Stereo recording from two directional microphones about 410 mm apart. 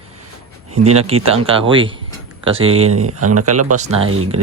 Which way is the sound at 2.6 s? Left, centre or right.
Right.